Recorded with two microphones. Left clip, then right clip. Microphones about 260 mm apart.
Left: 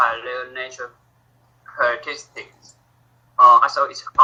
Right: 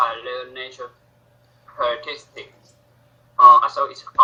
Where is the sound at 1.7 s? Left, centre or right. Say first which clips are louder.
Left 3 dB; centre.